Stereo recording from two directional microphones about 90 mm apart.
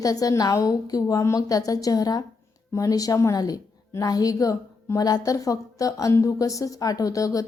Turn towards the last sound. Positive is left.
turn(degrees=40)  # may be behind; listen again after turning